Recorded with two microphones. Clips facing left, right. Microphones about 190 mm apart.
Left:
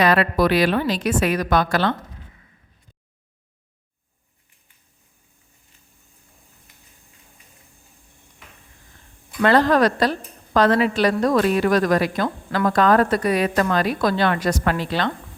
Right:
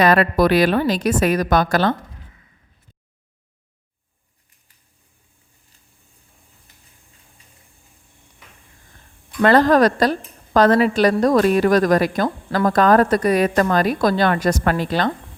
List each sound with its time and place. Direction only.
0.0 s a woman's voice: 45° right (ahead or behind)
6.7 s a sound: 35° right (ahead or behind)
9.4 s a woman's voice: 45° right (ahead or behind)